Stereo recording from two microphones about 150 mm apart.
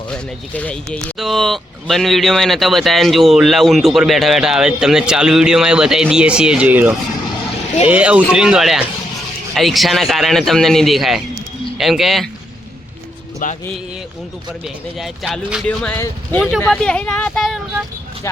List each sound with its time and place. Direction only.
0.1 s speech: 10° left (ahead or behind)
13.4 s a man's voice: 70° left (ahead or behind)
14.6 s speech: 5° right (ahead or behind)
15.6 s speech: 5° left (ahead or behind)